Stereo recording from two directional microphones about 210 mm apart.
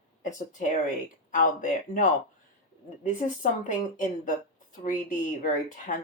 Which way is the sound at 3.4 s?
40° left (ahead or behind).